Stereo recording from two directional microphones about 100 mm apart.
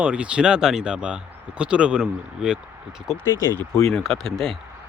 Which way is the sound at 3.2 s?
25° left (ahead or behind).